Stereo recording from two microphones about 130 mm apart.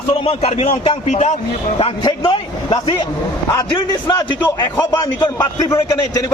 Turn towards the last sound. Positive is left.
turn(degrees=25)  # may be behind; listen again after turning